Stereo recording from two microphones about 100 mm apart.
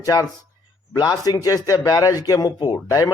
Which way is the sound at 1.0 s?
35° left (ahead or behind).